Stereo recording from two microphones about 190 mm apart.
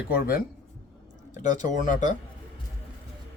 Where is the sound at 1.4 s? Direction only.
40° left (ahead or behind).